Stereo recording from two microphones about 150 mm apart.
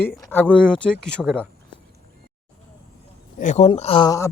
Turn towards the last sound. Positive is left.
turn(degrees=20)  # may be behind; listen again after turning